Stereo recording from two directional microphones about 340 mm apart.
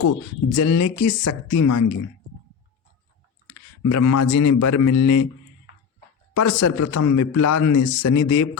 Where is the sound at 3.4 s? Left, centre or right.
Left.